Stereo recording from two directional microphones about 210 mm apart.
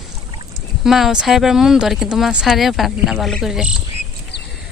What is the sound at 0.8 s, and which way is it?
Speech, centre (ahead or behind).